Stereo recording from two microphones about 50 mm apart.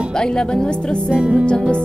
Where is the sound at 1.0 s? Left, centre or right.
Centre.